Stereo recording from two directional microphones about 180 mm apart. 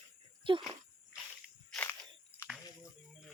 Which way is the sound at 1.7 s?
10° left (ahead or behind).